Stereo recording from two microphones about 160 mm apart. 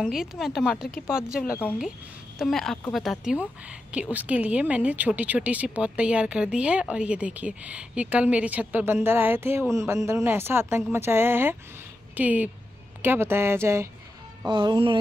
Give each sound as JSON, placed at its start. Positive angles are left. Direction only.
{"t": 0.0, "sound": "speech", "side_deg": 0}
{"t": 2.3, "sound": "speech", "side_deg": 0}
{"t": 14.5, "sound": "music", "side_deg": -30}